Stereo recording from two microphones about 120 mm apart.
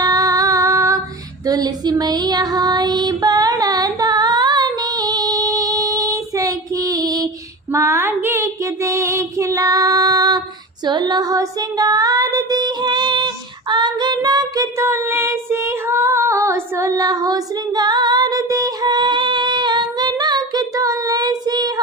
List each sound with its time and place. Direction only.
0.0 s female singing: 30° right (ahead or behind)
1.5 s child singing: 35° right (ahead or behind)